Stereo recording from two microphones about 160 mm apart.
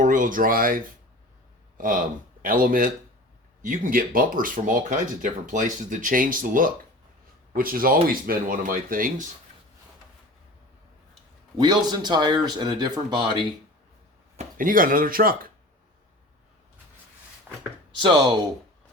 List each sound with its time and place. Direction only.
0.0 s speech: 55° right (ahead or behind)
1.8 s speech: 60° right (ahead or behind)
11.6 s speech: 25° right (ahead or behind)
14.3 s speech: 60° right (ahead or behind)
17.5 s a sound: 10° right (ahead or behind)
17.9 s speech: 30° right (ahead or behind)